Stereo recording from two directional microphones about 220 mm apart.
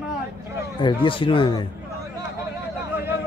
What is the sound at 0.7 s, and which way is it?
Speech, 20° left (ahead or behind).